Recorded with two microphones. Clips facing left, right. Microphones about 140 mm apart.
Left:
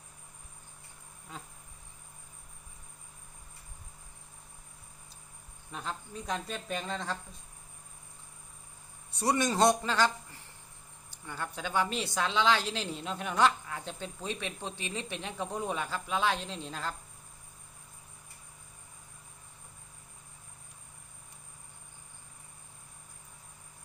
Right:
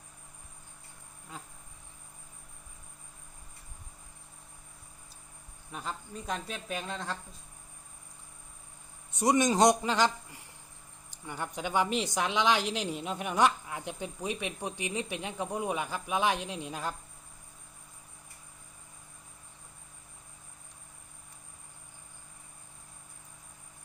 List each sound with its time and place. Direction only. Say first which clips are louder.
5.7 s speech: even; 5° right (ahead or behind)
9.1 s a woman's voice: right 3 dB; 15° right (ahead or behind)